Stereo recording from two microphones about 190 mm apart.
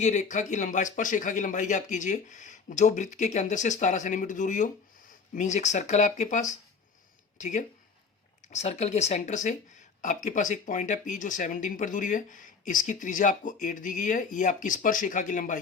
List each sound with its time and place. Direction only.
0.0 s speech: 40° left (ahead or behind)